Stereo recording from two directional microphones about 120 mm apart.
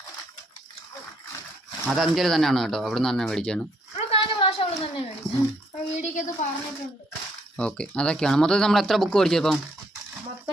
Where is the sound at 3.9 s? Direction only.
55° left (ahead or behind).